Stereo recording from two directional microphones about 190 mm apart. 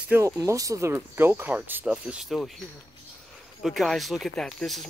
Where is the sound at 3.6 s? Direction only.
Centre (ahead or behind).